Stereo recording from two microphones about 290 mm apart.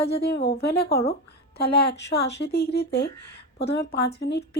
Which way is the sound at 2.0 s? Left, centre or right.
Left.